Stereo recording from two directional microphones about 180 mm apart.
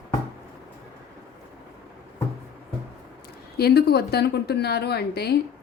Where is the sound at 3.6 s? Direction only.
60° left (ahead or behind).